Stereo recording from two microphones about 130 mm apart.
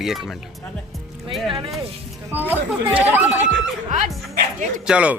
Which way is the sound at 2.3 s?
15° right (ahead or behind).